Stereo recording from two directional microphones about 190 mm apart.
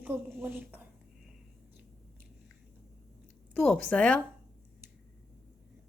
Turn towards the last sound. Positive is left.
turn(degrees=5)  # may be behind; listen again after turning